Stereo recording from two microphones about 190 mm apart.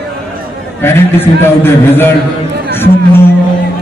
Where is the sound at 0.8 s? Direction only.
10° left (ahead or behind).